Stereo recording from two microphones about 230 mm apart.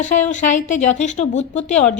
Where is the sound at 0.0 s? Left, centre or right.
Left.